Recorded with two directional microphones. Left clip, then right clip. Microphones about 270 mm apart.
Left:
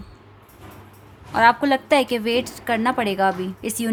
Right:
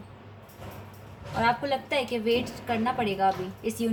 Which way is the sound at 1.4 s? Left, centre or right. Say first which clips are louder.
Left 9 dB; left.